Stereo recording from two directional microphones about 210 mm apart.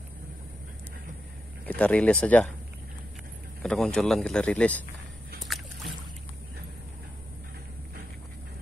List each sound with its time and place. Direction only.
1.7 s speech: 5° left (ahead or behind)
3.6 s speech: 5° left (ahead or behind)
5.4 s boat: centre (ahead or behind)